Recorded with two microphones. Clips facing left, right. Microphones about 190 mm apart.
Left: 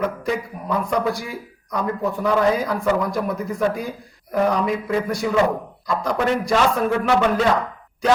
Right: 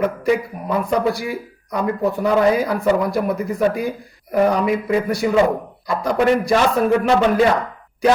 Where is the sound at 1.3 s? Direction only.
5° right (ahead or behind).